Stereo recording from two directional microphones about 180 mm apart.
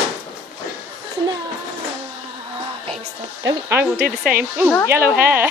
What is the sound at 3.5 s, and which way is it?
Speech, 15° right (ahead or behind).